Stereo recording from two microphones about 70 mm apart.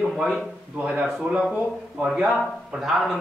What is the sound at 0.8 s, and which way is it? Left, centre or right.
A man's voice, right.